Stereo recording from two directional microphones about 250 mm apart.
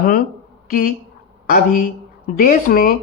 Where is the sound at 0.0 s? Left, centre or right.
Left.